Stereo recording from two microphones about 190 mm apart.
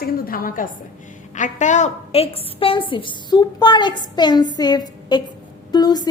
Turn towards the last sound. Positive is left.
turn(degrees=20)  # may be behind; listen again after turning